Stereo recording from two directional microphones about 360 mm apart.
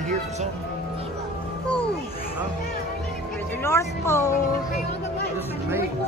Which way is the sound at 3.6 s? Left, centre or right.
Centre.